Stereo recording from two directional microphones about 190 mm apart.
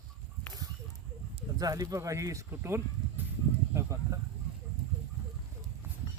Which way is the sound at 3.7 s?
15° right (ahead or behind).